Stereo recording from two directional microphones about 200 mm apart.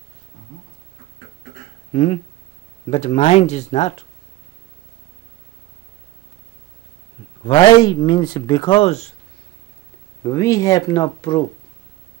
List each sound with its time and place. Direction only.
1.9 s speech: 35° left (ahead or behind)
7.4 s speech: 20° left (ahead or behind)
10.2 s speech: 15° left (ahead or behind)